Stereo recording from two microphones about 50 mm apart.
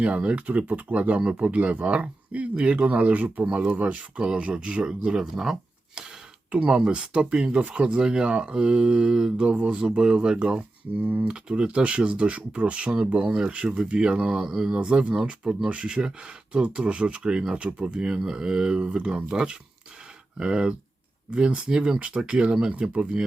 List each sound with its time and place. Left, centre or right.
0.0 s speech: right
11.0 s speech: right
11.3 s speech: right
14.8 s speech: right
18.0 s speech: centre